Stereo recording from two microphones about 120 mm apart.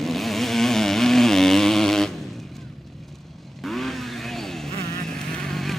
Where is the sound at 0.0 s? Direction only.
Centre (ahead or behind).